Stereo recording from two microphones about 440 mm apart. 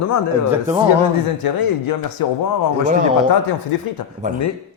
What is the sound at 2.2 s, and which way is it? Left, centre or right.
Speech, left.